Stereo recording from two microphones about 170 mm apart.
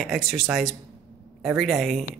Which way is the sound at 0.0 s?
Centre (ahead or behind).